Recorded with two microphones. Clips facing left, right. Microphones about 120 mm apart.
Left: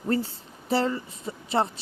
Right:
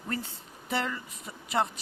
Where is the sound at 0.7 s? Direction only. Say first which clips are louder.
Left 7 dB; 30° left (ahead or behind).